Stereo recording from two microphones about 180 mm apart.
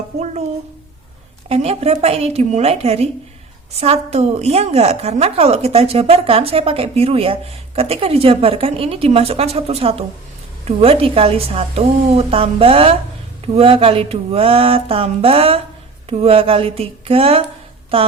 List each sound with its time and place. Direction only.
1.5 s a woman's voice: 35° right (ahead or behind)